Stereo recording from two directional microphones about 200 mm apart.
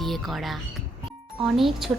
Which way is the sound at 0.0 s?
Centre (ahead or behind).